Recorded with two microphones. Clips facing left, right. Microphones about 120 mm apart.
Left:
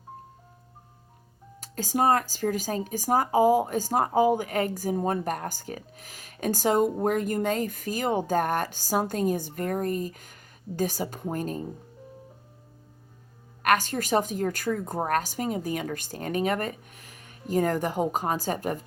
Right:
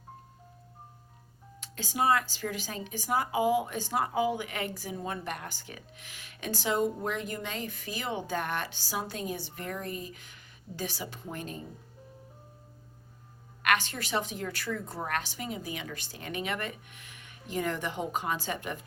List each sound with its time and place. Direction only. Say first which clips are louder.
1.6 s speech: left 4 dB; 45° left (ahead or behind)
13.6 s speech: left 5 dB; 40° left (ahead or behind)